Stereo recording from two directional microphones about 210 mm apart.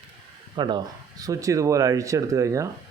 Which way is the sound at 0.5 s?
20° right (ahead or behind).